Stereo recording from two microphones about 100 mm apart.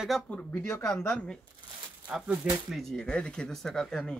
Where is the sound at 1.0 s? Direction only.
10° left (ahead or behind).